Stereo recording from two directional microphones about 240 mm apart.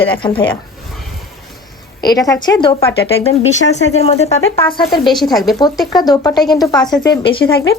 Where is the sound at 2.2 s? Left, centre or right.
Centre.